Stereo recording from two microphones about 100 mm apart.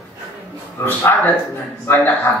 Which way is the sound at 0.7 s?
20° left (ahead or behind).